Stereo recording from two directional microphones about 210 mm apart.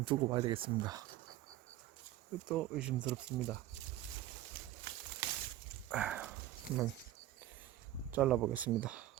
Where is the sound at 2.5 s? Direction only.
5° right (ahead or behind).